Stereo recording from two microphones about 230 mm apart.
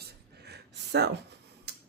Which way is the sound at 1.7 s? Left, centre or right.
Right.